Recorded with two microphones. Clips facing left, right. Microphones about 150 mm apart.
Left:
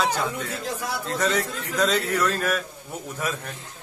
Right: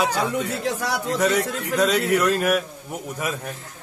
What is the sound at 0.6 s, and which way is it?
Speech, 80° right.